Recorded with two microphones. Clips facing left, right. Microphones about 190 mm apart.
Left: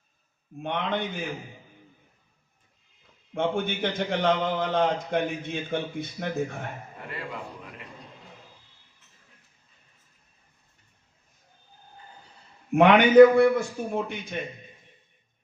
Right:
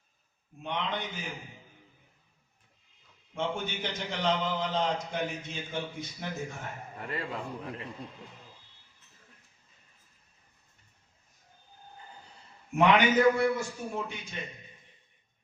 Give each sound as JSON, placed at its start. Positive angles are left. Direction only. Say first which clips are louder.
{"t": 0.6, "sound": "a man's voice", "louder": "left 5 dB", "side_deg": 55}
{"t": 3.3, "sound": "a man's voice", "louder": "left 6 dB", "side_deg": 55}
{"t": 12.7, "sound": "a man's voice", "louder": "left 8 dB", "side_deg": 60}